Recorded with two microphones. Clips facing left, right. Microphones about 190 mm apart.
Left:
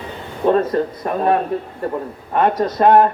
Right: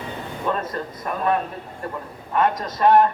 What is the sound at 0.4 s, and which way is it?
Speech, 35° left (ahead or behind).